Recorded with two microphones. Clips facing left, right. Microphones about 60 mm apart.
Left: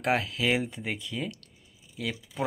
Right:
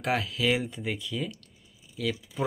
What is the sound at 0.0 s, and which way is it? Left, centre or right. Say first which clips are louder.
Speech: left 1 dB; left.